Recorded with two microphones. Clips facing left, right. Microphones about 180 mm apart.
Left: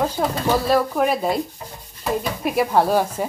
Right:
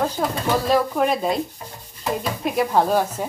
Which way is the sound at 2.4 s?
5° left (ahead or behind).